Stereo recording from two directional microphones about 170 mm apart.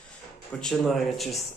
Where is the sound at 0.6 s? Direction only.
Centre (ahead or behind).